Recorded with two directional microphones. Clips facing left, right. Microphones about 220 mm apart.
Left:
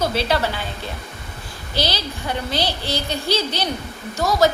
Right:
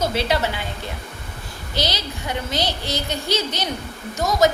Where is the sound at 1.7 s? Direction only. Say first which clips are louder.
Left 1 dB; 20° right (ahead or behind).